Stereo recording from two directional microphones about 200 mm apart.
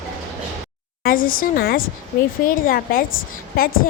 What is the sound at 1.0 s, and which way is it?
Speech, 45° left (ahead or behind).